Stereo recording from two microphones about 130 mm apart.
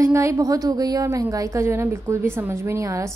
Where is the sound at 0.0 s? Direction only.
20° right (ahead or behind).